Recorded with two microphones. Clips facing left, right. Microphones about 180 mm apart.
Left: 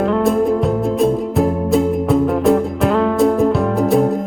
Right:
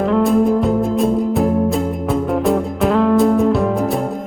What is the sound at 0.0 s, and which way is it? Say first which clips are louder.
Music: right 1 dB; centre (ahead or behind).